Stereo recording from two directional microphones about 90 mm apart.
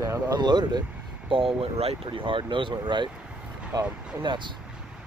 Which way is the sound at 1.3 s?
85° right.